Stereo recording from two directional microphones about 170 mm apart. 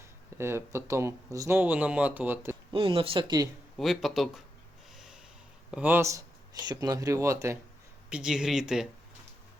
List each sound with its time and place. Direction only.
0.3 s speech: 15° right (ahead or behind)
2.7 s speech: 30° right (ahead or behind)
3.8 s speech: centre (ahead or behind)
4.9 s snort: 5° right (ahead or behind)
5.7 s speech: 10° right (ahead or behind)
8.1 s speech: 5° right (ahead or behind)